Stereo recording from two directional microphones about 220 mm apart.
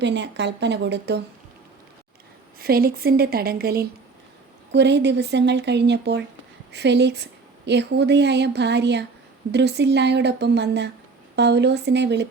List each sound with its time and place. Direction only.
0.0 s a woman's voice: 50° right (ahead or behind)
2.6 s a woman's voice: 45° right (ahead or behind)